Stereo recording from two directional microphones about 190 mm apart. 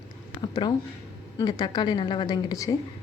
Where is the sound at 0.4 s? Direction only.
25° left (ahead or behind).